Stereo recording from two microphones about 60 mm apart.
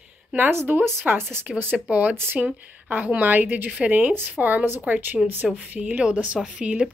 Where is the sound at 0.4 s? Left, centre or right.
Right.